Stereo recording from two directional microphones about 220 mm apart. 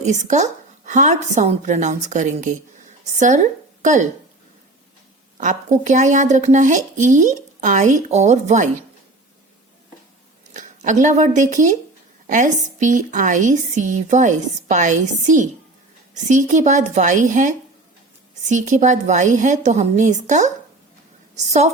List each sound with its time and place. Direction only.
0.0 s a woman's voice: 30° right (ahead or behind)
5.4 s speech: 35° right (ahead or behind)
10.5 s speech: 35° right (ahead or behind)